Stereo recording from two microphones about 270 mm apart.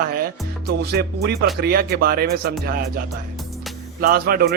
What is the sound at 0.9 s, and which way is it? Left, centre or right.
Speech, right.